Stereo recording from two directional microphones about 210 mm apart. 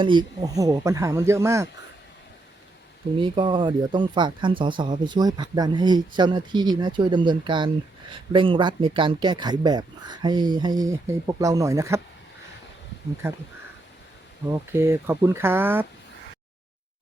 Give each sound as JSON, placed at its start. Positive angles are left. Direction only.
{"t": 0.0, "sound": "speech", "side_deg": -20}
{"t": 3.2, "sound": "speech", "side_deg": -20}
{"t": 13.2, "sound": "speech", "side_deg": -10}
{"t": 14.7, "sound": "speech", "side_deg": -10}